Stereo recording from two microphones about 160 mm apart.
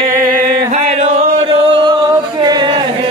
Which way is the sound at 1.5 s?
30° right (ahead or behind).